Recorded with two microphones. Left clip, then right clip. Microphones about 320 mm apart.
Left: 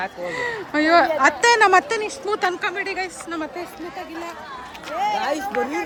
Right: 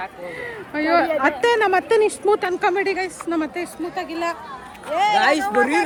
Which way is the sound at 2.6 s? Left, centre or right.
Centre.